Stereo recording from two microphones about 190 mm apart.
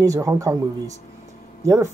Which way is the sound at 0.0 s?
15° right (ahead or behind).